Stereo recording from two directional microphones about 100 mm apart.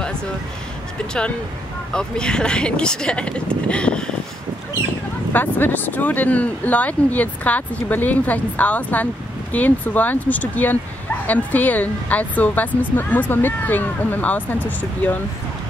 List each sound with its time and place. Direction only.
1.9 s speech: 10° left (ahead or behind)
5.3 s speech: 20° left (ahead or behind)